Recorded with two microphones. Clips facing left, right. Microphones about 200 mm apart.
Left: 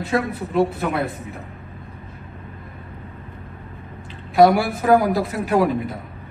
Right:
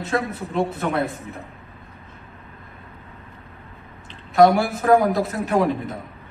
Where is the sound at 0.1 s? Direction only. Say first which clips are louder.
Left 3 dB; 5° left (ahead or behind).